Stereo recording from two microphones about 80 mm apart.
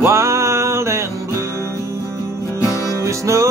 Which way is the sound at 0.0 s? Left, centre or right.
Right.